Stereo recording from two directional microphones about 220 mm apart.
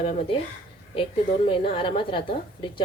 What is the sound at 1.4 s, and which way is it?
Speech, 25° left (ahead or behind).